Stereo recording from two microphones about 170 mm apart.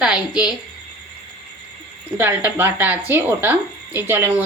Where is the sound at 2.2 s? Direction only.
10° right (ahead or behind).